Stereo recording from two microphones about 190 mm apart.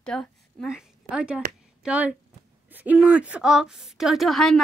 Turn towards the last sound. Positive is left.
turn(degrees=0)  # may be behind; listen again after turning